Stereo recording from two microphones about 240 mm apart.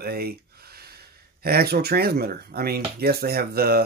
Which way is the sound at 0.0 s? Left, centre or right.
Right.